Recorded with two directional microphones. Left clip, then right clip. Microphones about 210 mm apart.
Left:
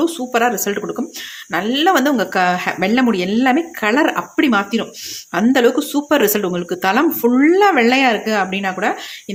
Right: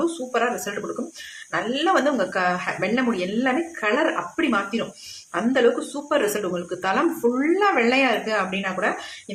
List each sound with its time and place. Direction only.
0.0 s speech: 50° left (ahead or behind)